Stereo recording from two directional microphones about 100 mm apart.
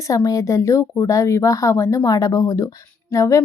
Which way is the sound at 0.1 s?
35° left (ahead or behind).